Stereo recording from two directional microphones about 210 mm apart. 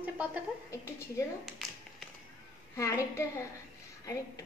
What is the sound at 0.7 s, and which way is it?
Speech, 15° left (ahead or behind).